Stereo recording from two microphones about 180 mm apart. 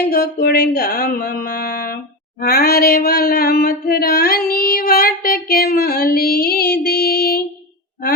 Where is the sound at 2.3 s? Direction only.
55° left (ahead or behind).